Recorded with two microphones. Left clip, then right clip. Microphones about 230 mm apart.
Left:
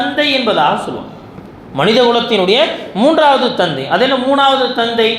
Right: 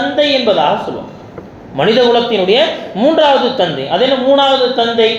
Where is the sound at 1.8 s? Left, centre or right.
Left.